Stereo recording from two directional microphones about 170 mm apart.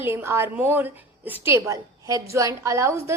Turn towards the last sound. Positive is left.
turn(degrees=-15)  # may be behind; listen again after turning